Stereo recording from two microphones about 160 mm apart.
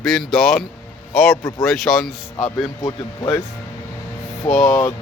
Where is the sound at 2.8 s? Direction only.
25° left (ahead or behind).